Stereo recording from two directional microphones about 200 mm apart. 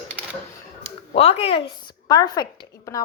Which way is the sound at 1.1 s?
30° left (ahead or behind).